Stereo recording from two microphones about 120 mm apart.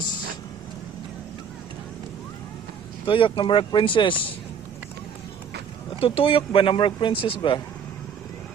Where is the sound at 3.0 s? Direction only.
45° left (ahead or behind).